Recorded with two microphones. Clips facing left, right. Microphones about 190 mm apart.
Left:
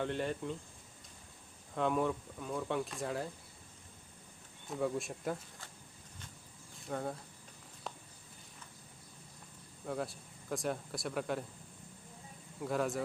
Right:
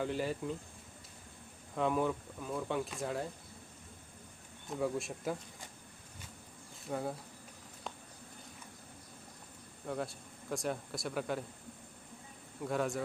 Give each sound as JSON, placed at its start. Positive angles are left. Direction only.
{"t": 0.0, "sound": "speech", "side_deg": -5}
{"t": 1.7, "sound": "speech", "side_deg": 0}
{"t": 4.7, "sound": "speech", "side_deg": 0}
{"t": 6.8, "sound": "speech", "side_deg": -5}
{"t": 9.8, "sound": "speech", "side_deg": 0}
{"t": 12.6, "sound": "speech", "side_deg": 0}